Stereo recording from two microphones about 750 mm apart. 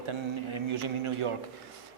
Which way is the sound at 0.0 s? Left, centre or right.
Right.